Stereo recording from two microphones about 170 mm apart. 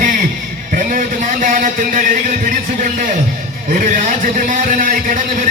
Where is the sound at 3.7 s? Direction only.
50° right (ahead or behind).